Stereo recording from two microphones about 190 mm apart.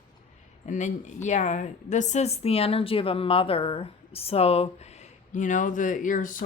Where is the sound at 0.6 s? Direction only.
40° left (ahead or behind).